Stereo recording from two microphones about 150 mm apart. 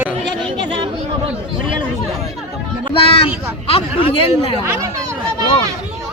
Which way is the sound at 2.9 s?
40° left (ahead or behind).